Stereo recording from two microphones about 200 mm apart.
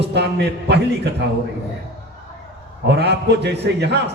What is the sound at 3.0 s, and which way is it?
A man's voice, 55° right (ahead or behind).